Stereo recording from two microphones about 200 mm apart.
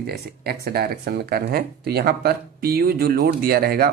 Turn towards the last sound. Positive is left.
turn(degrees=-50)  # may be behind; listen again after turning